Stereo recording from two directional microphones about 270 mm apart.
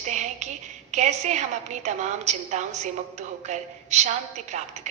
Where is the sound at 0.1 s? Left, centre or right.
Right.